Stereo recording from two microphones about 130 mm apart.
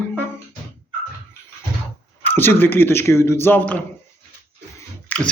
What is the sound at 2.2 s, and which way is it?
Speech, 15° left (ahead or behind).